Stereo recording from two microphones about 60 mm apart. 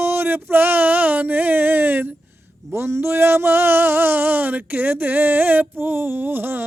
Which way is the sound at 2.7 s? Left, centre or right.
Right.